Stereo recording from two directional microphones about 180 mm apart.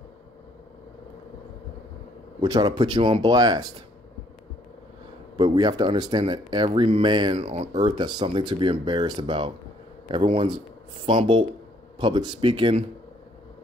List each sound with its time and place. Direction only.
2.4 s speech: 25° right (ahead or behind)
5.4 s speech: 25° right (ahead or behind)